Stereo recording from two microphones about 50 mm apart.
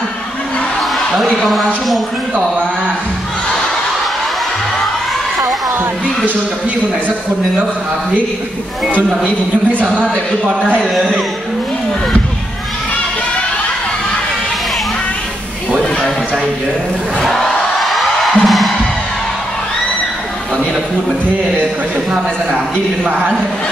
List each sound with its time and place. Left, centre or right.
0.9 s a woman's voice: centre
9.7 s speech: right
17.2 s music: centre